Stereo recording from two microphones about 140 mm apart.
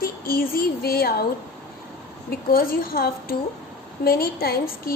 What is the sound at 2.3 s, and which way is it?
A woman's voice, 90° left.